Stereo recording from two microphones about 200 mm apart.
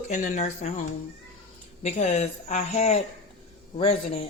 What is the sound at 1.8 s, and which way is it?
Speech, 35° left (ahead or behind).